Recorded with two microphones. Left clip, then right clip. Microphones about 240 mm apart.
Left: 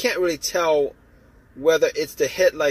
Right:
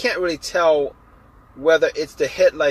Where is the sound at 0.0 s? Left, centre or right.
Left.